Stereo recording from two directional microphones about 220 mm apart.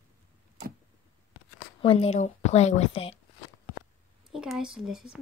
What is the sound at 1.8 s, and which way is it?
A woman's voice, 25° left (ahead or behind).